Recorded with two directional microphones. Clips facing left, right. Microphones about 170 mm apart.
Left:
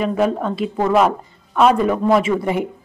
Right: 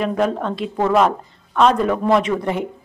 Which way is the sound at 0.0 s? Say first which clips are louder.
Left 1 dB; centre (ahead or behind).